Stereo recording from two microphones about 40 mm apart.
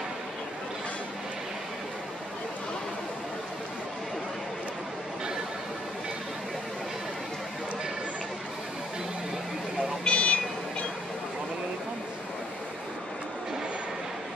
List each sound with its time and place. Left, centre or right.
10.0 s car alarm: left